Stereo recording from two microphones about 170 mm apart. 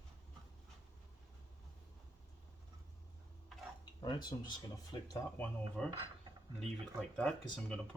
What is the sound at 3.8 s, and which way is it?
Speech, 25° left (ahead or behind).